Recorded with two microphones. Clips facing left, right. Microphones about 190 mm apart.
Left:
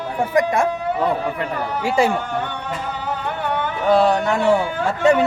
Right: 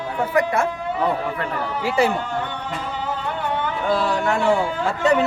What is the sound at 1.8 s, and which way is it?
Speech, 15° left (ahead or behind).